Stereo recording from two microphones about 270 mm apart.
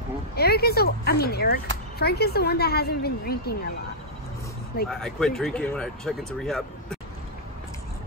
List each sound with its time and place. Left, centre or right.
0.4 s speech: left
4.8 s speech: centre